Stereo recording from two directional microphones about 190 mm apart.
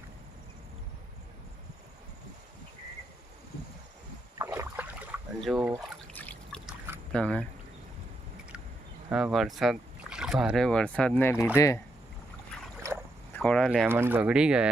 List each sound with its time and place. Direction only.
4.4 s rowboat: 15° right (ahead or behind)
5.4 s speech: centre (ahead or behind)
6.1 s trickle: 10° left (ahead or behind)
7.1 s speech: 5° left (ahead or behind)
9.1 s speech: centre (ahead or behind); by 11.8 s 15° left (ahead or behind)
13.3 s speech: 5° left (ahead or behind)
13.8 s speech: 10° right (ahead or behind)